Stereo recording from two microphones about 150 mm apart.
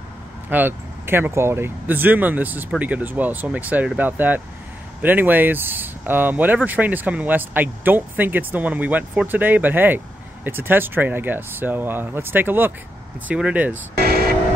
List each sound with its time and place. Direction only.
0.5 s speech: 15° right (ahead or behind)
13.9 s vehicle: 90° right